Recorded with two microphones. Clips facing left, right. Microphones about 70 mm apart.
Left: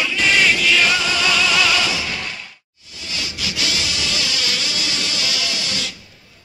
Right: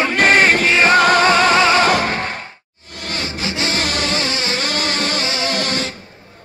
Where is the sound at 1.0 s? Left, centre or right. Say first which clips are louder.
Right 8 dB; right.